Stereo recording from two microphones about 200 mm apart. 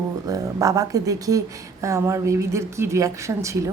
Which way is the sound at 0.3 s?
15° right (ahead or behind).